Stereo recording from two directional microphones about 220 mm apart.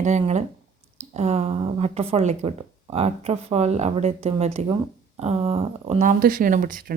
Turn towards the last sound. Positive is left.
turn(degrees=-40)  # may be behind; listen again after turning